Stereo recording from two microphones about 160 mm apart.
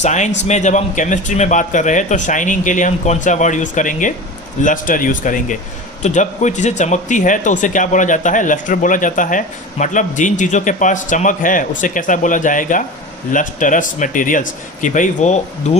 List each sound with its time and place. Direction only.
0.0 s speech: 45° left (ahead or behind)